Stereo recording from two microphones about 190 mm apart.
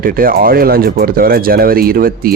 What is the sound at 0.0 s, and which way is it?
Speech, 50° right (ahead or behind).